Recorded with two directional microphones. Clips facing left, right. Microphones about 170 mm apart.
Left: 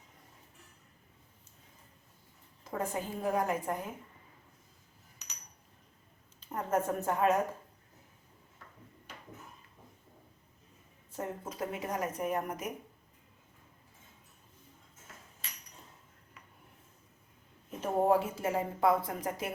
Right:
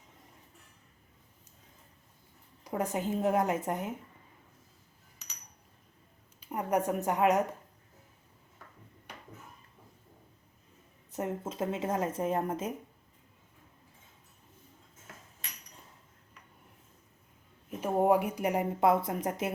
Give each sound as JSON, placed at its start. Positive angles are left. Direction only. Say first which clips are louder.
{"t": 2.6, "sound": "speech", "louder": "right 4 dB", "side_deg": -15}
{"t": 6.4, "sound": "a woman's voice", "louder": "right 2 dB", "side_deg": -15}
{"t": 11.1, "sound": "speech", "louder": "right 4 dB", "side_deg": -20}
{"t": 17.7, "sound": "speech", "louder": "right 2 dB", "side_deg": -10}